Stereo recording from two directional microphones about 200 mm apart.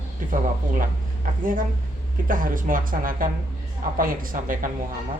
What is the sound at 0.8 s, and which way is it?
A woman's voice, 45° right (ahead or behind).